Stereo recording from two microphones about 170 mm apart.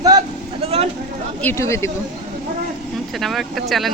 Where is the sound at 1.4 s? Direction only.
15° left (ahead or behind).